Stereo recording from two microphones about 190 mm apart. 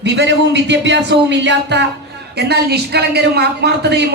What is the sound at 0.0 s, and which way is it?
Speech, 65° right (ahead or behind).